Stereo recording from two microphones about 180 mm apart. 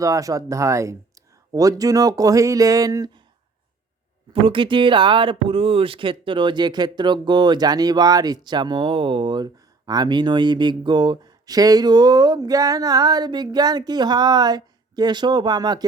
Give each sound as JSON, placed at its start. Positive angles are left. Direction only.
{"t": 0.0, "sound": "speech", "side_deg": -20}
{"t": 4.3, "sound": "speech", "side_deg": -30}